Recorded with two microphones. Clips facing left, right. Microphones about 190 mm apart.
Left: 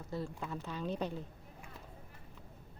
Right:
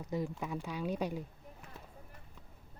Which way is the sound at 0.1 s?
15° right (ahead or behind).